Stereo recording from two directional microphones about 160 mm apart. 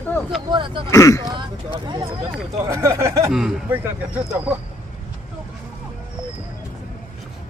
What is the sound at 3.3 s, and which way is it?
Speech, 5° right (ahead or behind).